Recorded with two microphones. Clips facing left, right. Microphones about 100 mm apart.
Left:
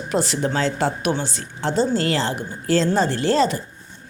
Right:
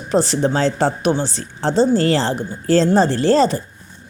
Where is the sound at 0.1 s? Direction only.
35° right (ahead or behind).